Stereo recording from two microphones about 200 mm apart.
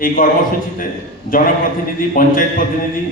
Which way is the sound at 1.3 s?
45° left (ahead or behind).